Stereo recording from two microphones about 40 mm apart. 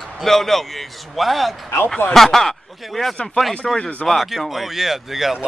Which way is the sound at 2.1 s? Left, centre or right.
Centre.